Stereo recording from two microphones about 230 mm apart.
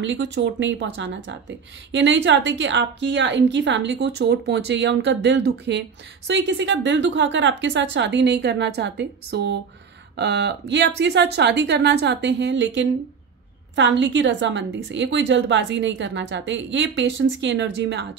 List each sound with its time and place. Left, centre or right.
0.0 s a woman's voice: right